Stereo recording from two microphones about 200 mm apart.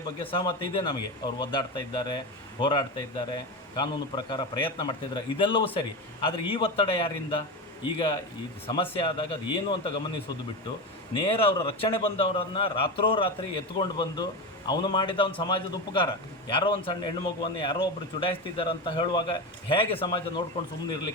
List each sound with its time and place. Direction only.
0.2 s speech: 25° left (ahead or behind)
11.1 s speech: 25° left (ahead or behind)